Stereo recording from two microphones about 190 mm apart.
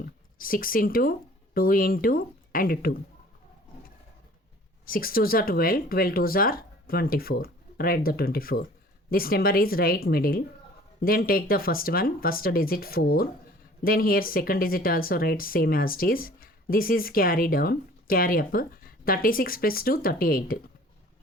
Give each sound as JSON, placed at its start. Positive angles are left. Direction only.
{"t": 0.3, "sound": "speech", "side_deg": 50}
{"t": 4.9, "sound": "speech", "side_deg": 50}